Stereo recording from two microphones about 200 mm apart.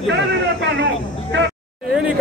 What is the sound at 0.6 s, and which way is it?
Speech, 60° right (ahead or behind).